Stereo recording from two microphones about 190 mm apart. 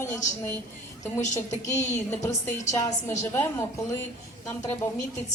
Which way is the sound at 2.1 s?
10° left (ahead or behind).